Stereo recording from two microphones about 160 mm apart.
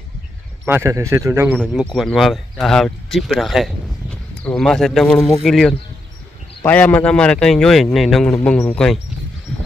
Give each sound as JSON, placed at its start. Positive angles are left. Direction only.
{"t": 0.7, "sound": "a man's voice", "side_deg": -15}
{"t": 1.6, "sound": "a man's voice", "side_deg": -5}
{"t": 9.5, "sound": "a sound", "side_deg": 5}